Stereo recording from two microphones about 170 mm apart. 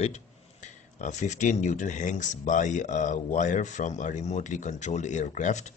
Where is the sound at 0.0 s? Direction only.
45° left (ahead or behind).